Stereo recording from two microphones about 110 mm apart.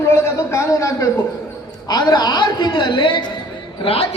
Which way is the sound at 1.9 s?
40° left (ahead or behind).